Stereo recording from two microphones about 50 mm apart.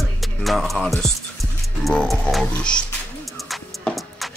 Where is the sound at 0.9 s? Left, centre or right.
Centre.